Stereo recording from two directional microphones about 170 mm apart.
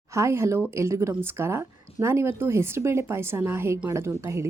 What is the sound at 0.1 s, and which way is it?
Speech, 15° right (ahead or behind).